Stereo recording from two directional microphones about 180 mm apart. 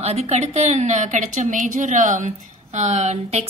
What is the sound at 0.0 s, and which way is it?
A woman's voice, 35° right (ahead or behind).